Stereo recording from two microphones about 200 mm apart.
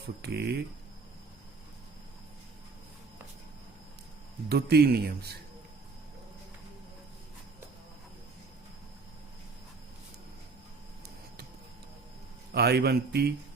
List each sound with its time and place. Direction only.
0.2 s speech: 55° right (ahead or behind)
4.4 s speech: 55° right (ahead or behind)
12.5 s speech: 55° right (ahead or behind)